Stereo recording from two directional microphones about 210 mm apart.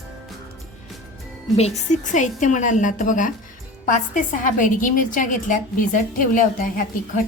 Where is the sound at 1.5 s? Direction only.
30° left (ahead or behind).